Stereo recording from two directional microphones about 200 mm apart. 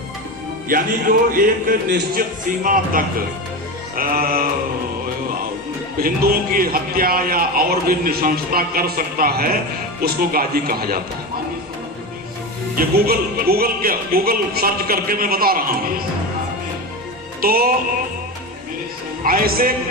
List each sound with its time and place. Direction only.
0.7 s a man's voice: 45° right (ahead or behind)
6.0 s a man's voice: 45° right (ahead or behind)
12.7 s a man's voice: 50° right (ahead or behind)
17.4 s a man's voice: 50° right (ahead or behind)
19.2 s a man's voice: 45° right (ahead or behind)